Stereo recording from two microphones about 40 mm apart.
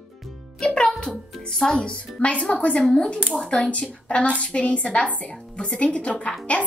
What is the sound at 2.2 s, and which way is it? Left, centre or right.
Speech, left.